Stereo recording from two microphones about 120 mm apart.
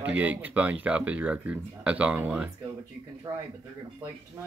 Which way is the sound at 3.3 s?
30° right (ahead or behind).